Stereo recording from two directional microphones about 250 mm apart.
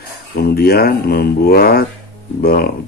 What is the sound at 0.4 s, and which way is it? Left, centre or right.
Speech, left.